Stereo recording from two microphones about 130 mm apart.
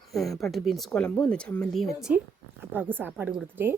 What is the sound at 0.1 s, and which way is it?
Speech, centre (ahead or behind).